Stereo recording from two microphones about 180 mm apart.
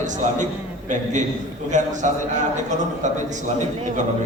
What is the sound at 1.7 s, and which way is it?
Speech, 45° right (ahead or behind).